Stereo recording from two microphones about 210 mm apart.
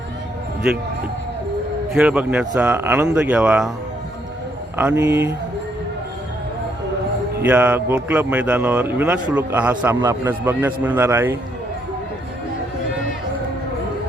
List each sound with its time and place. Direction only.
0.7 s a man's voice: centre (ahead or behind)
1.9 s a man's voice: 5° right (ahead or behind)
4.8 s a man's voice: 10° right (ahead or behind)
7.4 s a man's voice: 10° right (ahead or behind)